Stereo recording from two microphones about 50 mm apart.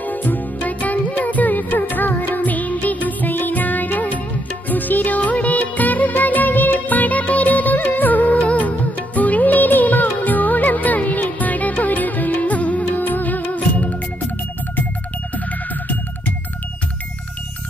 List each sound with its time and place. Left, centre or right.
0.0 s music: left
4.6 s music of bollywood: left